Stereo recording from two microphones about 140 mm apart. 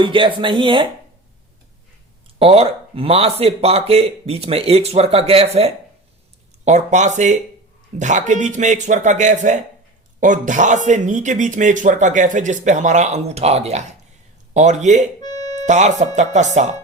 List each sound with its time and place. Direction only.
0.0 s speech: 35° right (ahead or behind)
2.2 s speech: 40° right (ahead or behind)
6.7 s speech: 55° right (ahead or behind)
15.2 s music: 30° left (ahead or behind)
15.6 s speech: 55° right (ahead or behind)